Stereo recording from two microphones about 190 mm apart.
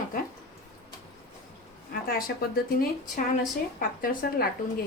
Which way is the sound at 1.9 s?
50° left (ahead or behind).